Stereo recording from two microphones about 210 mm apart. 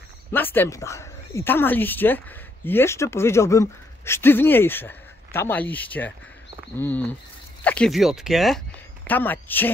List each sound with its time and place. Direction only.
0.3 s speech: 10° left (ahead or behind)